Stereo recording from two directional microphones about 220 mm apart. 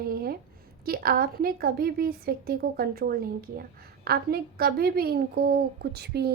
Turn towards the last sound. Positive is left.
turn(degrees=-45)  # may be behind; listen again after turning